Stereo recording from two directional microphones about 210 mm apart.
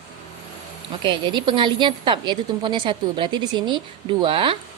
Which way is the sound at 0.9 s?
25° right (ahead or behind).